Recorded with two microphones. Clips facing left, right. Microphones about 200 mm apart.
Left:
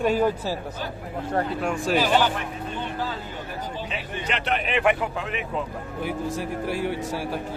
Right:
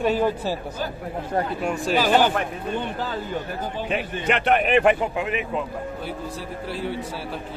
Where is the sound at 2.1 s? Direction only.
55° right (ahead or behind).